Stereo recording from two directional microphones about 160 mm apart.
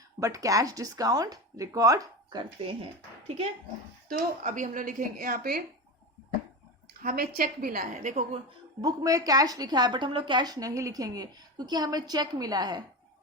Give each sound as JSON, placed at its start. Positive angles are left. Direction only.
{"t": 0.2, "sound": "a woman's voice", "side_deg": -20}
{"t": 4.4, "sound": "a woman's voice", "side_deg": -50}
{"t": 7.0, "sound": "a woman's voice", "side_deg": -65}
{"t": 8.8, "sound": "a woman's voice", "side_deg": -25}